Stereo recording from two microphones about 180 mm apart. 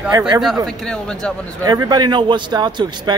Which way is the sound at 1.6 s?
20° right (ahead or behind).